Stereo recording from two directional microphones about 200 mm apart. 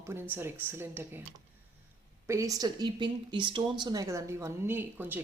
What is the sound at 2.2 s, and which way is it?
Speech, 15° right (ahead or behind).